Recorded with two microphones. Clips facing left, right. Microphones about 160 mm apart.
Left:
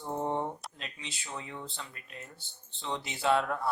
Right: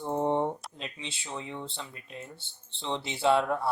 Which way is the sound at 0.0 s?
25° right (ahead or behind).